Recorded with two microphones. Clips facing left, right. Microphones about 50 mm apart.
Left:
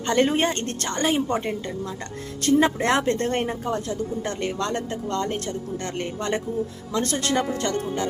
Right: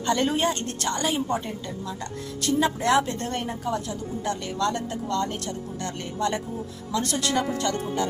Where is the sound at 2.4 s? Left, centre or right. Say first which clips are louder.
Left 4 dB; left.